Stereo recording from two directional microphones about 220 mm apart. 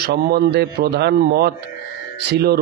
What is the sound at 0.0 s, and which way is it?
A man's voice, 45° right (ahead or behind).